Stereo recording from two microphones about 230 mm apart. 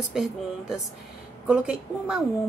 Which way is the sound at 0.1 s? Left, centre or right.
Centre.